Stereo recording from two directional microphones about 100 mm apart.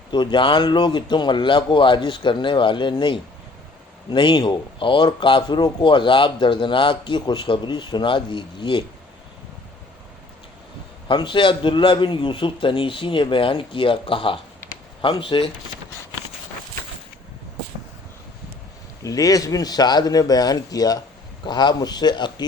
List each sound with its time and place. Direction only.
0.1 s speech: 50° left (ahead or behind)
11.1 s a man's voice: 55° left (ahead or behind)
19.0 s speech: 35° left (ahead or behind)